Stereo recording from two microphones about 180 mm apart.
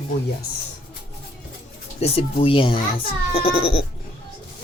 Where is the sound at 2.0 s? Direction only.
35° left (ahead or behind).